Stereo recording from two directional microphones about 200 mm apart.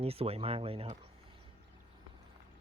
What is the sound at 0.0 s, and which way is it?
Speech, 30° right (ahead or behind).